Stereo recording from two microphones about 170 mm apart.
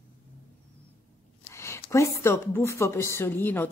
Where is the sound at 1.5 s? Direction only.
15° left (ahead or behind).